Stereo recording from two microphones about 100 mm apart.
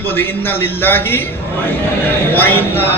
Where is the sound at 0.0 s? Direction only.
20° left (ahead or behind).